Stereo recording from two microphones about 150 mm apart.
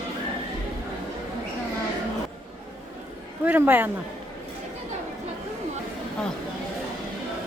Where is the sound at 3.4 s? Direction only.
15° right (ahead or behind).